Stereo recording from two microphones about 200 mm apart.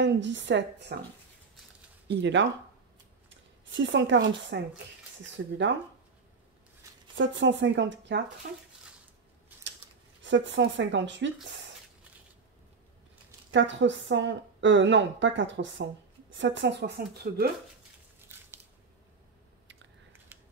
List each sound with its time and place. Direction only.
0.0 s speech: 65° right (ahead or behind)
2.0 s speech: 60° right (ahead or behind)
5.4 s speech: 90° right
7.2 s speech: 65° right (ahead or behind)
9.5 s a sound: 10° right (ahead or behind)
10.2 s speech: 65° right (ahead or behind)
13.5 s speech: 65° right (ahead or behind)
18.3 s biting: 10° right (ahead or behind)